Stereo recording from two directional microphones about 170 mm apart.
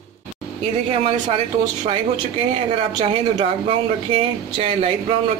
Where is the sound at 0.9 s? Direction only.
35° right (ahead or behind).